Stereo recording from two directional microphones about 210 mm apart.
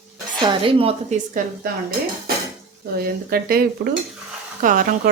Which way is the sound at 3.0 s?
45° right (ahead or behind).